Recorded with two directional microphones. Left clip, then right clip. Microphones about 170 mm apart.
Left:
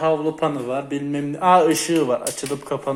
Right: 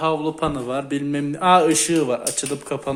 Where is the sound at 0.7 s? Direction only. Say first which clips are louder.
Even; 30° right (ahead or behind).